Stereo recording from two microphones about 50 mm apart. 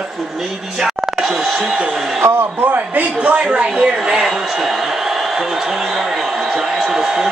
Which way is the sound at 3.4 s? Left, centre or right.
Centre.